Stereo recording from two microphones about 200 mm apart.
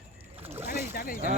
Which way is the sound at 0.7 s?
45° left (ahead or behind).